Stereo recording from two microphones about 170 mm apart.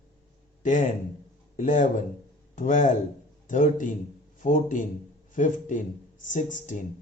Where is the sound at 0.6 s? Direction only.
50° left (ahead or behind).